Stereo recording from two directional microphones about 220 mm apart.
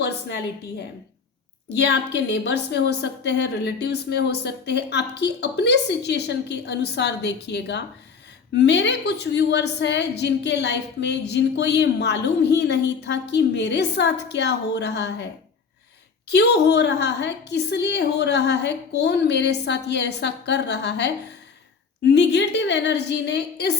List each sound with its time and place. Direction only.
0.0 s a woman's voice: 50° left (ahead or behind)
1.7 s a woman's voice: 50° left (ahead or behind)
16.3 s a woman's voice: 50° left (ahead or behind)